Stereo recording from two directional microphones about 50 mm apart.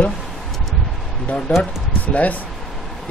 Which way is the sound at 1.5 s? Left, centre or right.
Left.